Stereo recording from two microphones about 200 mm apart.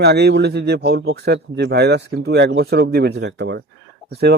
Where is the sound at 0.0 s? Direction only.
55° right (ahead or behind).